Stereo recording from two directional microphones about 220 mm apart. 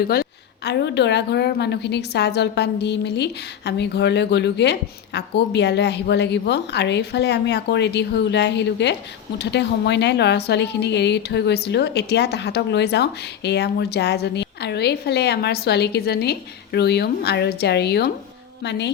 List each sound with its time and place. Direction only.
0.1 s a woman's voice: 45° left (ahead or behind)